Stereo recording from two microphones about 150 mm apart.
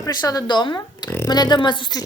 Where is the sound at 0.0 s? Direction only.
25° left (ahead or behind).